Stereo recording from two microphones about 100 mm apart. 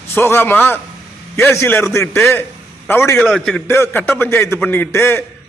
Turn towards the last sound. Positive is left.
turn(degrees=25)  # may be behind; listen again after turning